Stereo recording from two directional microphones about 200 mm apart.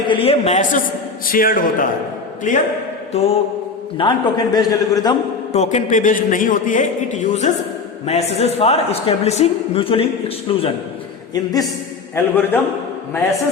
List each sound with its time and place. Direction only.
0.1 s a man's voice: 30° left (ahead or behind)
5.5 s a man's voice: 35° left (ahead or behind)
12.1 s a man's voice: 10° left (ahead or behind)